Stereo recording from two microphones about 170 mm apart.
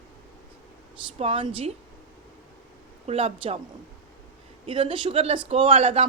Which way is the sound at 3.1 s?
35° right (ahead or behind).